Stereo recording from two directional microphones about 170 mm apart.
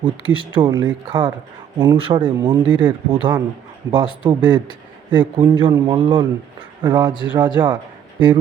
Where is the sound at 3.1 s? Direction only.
30° right (ahead or behind).